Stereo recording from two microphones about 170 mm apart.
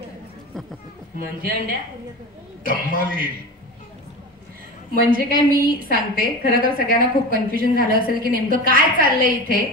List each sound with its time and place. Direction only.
1.1 s a woman's voice: 60° right (ahead or behind)
2.6 s a woman's voice: 55° right (ahead or behind)
5.1 s a woman's voice: 60° right (ahead or behind)